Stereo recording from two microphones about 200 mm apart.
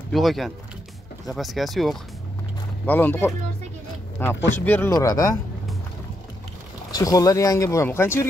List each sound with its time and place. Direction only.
0.1 s speech: centre (ahead or behind); by 5.4 s 15° left (ahead or behind)
6.9 s speech: 15° left (ahead or behind)